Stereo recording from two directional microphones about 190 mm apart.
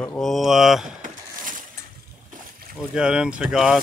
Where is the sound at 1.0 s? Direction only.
45° right (ahead or behind).